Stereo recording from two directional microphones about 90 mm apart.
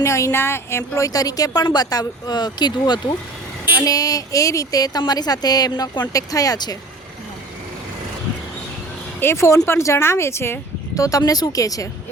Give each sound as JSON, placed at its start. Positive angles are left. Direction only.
{"t": 0.0, "sound": "a woman's voice", "side_deg": 35}
{"t": 3.8, "sound": "a woman's voice", "side_deg": 40}
{"t": 6.1, "sound": "a woman's voice", "side_deg": 40}
{"t": 9.2, "sound": "speech", "side_deg": 30}
{"t": 10.9, "sound": "speech", "side_deg": 40}